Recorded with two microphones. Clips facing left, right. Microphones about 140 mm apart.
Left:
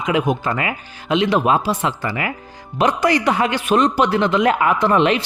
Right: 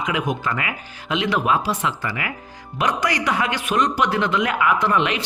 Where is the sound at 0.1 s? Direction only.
30° left (ahead or behind).